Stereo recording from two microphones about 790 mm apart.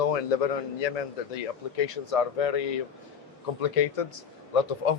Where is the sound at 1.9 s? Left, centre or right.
Left.